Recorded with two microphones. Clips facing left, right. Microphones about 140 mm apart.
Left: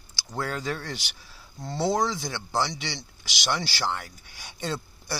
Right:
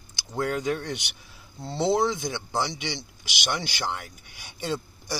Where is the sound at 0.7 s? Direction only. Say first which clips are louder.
Right 4 dB; 20° right (ahead or behind).